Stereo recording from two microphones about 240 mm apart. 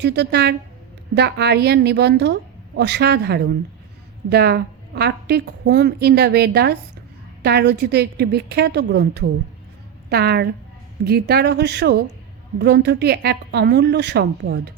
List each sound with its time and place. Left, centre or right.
0.0 s a woman's voice: right